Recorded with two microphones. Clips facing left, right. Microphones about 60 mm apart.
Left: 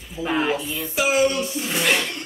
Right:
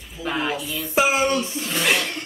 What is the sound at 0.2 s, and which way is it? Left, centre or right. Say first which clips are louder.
Speech: left 3 dB; centre.